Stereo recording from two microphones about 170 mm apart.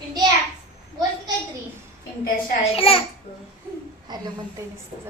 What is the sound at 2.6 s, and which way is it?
Speech, 35° left (ahead or behind).